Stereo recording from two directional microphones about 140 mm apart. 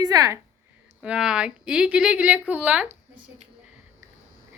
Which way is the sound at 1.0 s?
5° right (ahead or behind).